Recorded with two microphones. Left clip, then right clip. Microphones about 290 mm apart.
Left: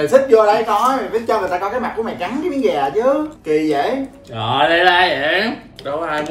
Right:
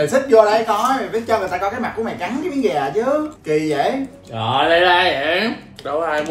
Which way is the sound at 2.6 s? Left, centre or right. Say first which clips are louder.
Left 3 dB; centre.